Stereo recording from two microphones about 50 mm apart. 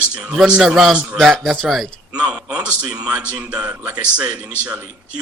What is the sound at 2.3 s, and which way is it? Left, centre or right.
A man's voice, right.